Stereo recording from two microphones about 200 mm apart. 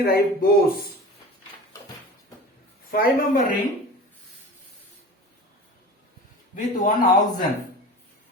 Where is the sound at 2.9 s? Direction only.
45° left (ahead or behind).